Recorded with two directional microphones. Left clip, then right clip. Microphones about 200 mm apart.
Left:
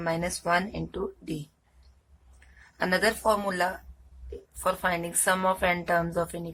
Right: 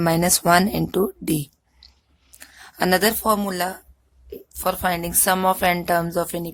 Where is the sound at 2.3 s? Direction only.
50° right (ahead or behind).